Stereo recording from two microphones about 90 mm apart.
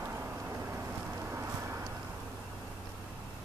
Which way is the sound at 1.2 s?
30° right (ahead or behind).